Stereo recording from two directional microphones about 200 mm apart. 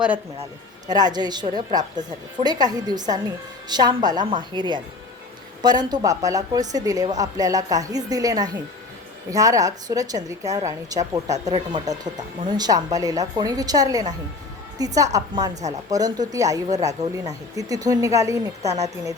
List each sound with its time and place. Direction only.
0.9 s a woman's voice: 20° right (ahead or behind)